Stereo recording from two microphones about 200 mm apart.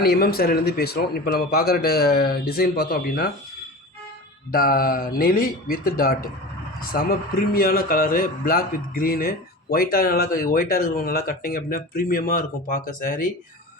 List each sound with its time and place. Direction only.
0.0 s speech: 50° left (ahead or behind)
4.5 s speech: 45° left (ahead or behind)